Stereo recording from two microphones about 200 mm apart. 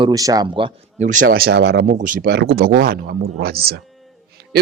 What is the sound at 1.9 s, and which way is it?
Speech, 40° right (ahead or behind).